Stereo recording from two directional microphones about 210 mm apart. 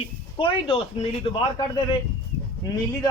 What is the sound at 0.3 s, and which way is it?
A man's voice, 25° left (ahead or behind).